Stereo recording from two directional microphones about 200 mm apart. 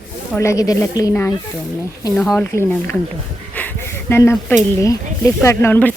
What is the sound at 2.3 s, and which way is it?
Speech, 10° left (ahead or behind).